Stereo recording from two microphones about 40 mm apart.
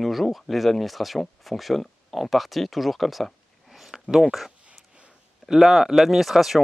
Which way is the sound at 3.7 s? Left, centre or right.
Centre.